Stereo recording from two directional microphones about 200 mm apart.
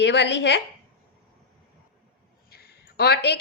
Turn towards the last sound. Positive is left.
turn(degrees=55)  # may be behind; listen again after turning